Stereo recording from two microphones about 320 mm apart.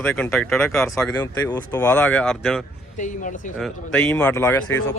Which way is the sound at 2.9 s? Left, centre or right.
Left.